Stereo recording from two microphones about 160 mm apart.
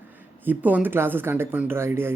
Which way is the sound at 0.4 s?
10° right (ahead or behind).